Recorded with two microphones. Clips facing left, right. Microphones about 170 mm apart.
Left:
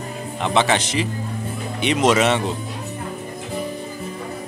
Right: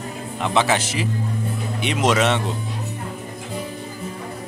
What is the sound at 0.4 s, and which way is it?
Speech, 5° right (ahead or behind).